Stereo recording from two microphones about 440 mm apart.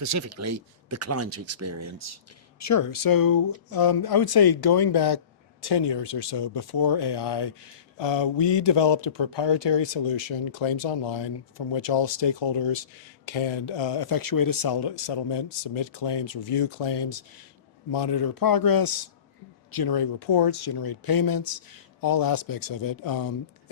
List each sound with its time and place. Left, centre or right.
0.0 s speech: right
2.6 s speech: left
7.9 s speech: left